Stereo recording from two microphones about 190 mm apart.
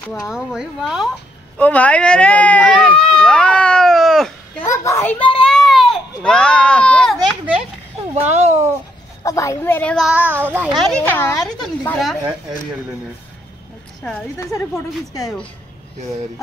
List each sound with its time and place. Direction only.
0.3 s speech: 5° right (ahead or behind)
1.6 s speech: 5° left (ahead or behind)
4.8 s child singing: 10° left (ahead or behind)
8.1 s a sound: 35° right (ahead or behind)
9.2 s a woman's voice: 15° left (ahead or behind)
14.0 s a woman's voice: 10° left (ahead or behind)